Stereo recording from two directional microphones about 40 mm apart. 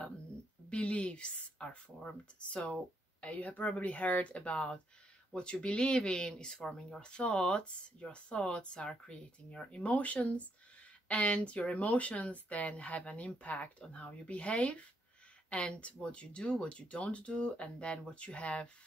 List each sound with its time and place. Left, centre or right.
0.7 s speech: left
3.3 s speech: left